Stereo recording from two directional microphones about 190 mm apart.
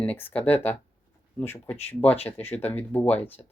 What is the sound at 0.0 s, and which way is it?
Speech, 10° left (ahead or behind).